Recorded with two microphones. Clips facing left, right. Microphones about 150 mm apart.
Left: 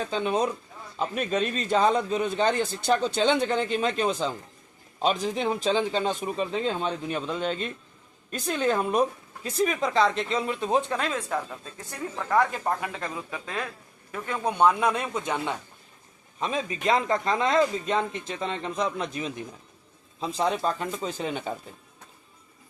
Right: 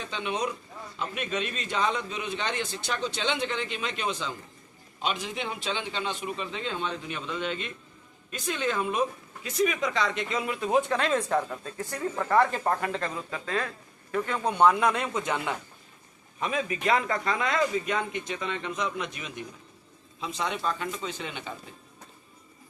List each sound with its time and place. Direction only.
0.0 s a man's voice: 40° left (ahead or behind); by 10.9 s 25° left (ahead or behind)
10.9 s speech: 5° left (ahead or behind)
13.0 s speech: 15° left (ahead or behind)
16.4 s a man's voice: 25° left (ahead or behind)